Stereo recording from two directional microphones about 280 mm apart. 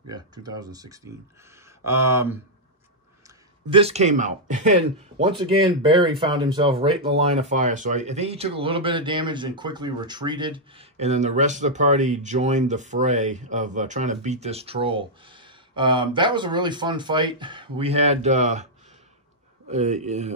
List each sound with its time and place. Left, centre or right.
0.1 s speech: centre
3.7 s speech: right
19.7 s speech: right